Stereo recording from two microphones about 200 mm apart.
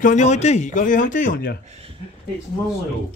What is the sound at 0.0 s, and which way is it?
A man's voice, 35° left (ahead or behind).